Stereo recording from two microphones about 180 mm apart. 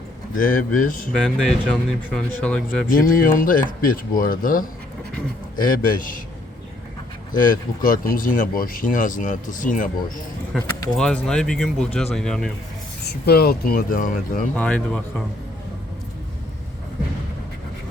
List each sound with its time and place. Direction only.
0.3 s speech: 50° left (ahead or behind)
1.1 s speech: 5° left (ahead or behind)
2.8 s speech: 50° left (ahead or behind)
7.3 s speech: 50° left (ahead or behind)
10.5 s speech: centre (ahead or behind)
13.1 s speech: 60° left (ahead or behind)
14.5 s speech: 5° left (ahead or behind)